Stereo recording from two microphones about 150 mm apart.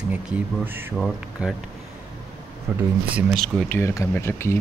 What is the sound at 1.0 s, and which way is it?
Speech, centre (ahead or behind).